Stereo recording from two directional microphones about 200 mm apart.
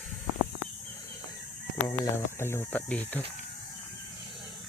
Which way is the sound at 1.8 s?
15° left (ahead or behind).